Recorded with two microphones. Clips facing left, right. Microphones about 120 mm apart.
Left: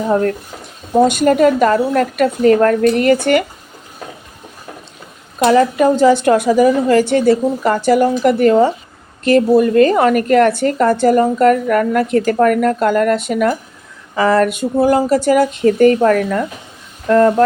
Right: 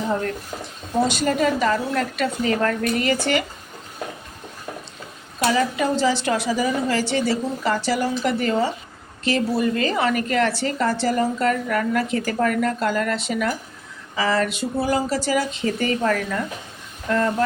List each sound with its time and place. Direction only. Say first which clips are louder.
0.1 s a woman's voice: left 9 dB; 45° left (ahead or behind)
5.5 s a woman's voice: left 9 dB; 50° left (ahead or behind)